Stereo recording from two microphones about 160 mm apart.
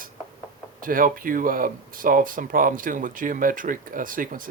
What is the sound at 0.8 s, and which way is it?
Speech, 60° right (ahead or behind).